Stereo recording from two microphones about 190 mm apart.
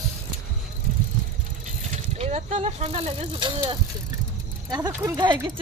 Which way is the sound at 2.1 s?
35° right (ahead or behind).